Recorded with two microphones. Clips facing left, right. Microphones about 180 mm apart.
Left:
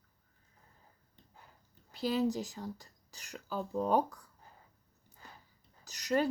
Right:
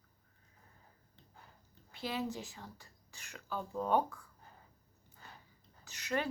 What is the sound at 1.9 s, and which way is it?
Speech, 35° left (ahead or behind).